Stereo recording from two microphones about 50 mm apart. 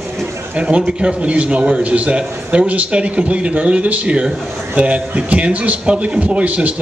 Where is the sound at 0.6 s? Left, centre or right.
Right.